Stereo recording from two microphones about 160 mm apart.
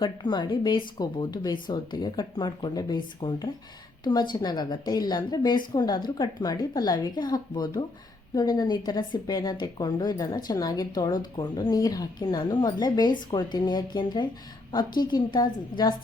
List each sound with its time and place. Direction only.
0.0 s a woman's voice: 25° left (ahead or behind)